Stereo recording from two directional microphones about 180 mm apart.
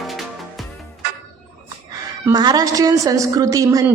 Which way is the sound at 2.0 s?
20° right (ahead or behind).